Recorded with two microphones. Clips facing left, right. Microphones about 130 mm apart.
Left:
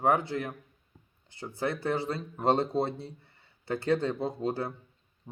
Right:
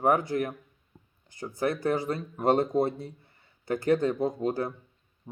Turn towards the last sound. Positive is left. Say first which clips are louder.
# right 3 dB
turn(degrees=30)  # may be behind; listen again after turning